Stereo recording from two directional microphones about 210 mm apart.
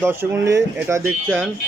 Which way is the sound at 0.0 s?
10° right (ahead or behind).